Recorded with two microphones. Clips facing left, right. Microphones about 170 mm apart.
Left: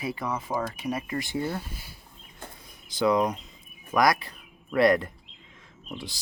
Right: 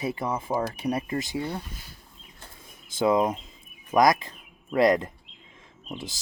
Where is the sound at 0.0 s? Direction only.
25° right (ahead or behind).